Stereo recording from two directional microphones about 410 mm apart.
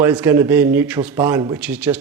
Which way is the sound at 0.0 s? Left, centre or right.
Centre.